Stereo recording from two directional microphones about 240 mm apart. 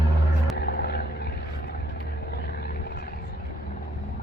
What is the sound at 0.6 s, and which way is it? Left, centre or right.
Vehicle, left.